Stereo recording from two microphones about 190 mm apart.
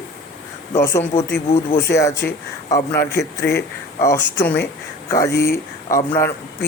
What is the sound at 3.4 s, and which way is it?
Speech, 55° left (ahead or behind).